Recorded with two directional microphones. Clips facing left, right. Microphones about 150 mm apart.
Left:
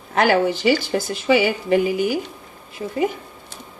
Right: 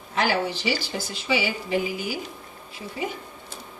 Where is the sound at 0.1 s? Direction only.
55° left (ahead or behind).